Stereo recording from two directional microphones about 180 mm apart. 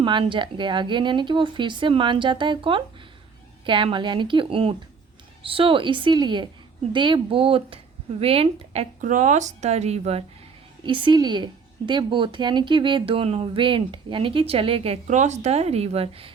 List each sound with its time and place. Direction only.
0.0 s speech: 25° right (ahead or behind)